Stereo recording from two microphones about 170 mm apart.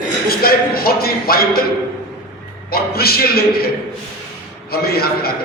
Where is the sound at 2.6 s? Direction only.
65° left (ahead or behind).